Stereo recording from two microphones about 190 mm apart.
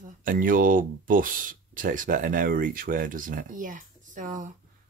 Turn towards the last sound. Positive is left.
turn(degrees=-40)  # may be behind; listen again after turning